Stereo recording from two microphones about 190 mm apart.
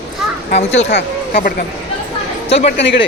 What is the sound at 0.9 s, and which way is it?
Speech, 65° left (ahead or behind).